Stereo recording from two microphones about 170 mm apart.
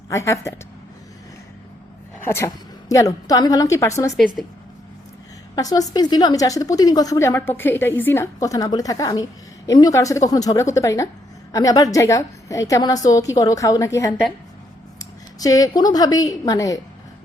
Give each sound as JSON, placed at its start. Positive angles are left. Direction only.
{"t": 0.1, "sound": "a woman's voice", "side_deg": 15}
{"t": 2.2, "sound": "a woman's voice", "side_deg": 15}
{"t": 5.5, "sound": "a woman's voice", "side_deg": 20}
{"t": 15.4, "sound": "a woman's voice", "side_deg": 20}